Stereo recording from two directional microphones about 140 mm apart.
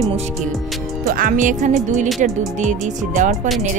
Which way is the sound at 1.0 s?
85° right.